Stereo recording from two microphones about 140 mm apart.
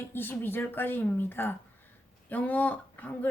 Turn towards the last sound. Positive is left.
turn(degrees=10)  # may be behind; listen again after turning